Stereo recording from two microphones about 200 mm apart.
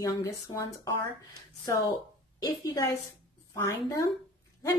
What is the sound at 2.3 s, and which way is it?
Speech, 20° left (ahead or behind).